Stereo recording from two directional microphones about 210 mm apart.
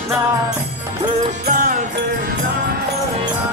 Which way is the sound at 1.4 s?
40° right (ahead or behind).